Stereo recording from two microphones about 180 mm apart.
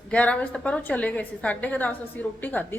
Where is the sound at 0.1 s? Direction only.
5° left (ahead or behind).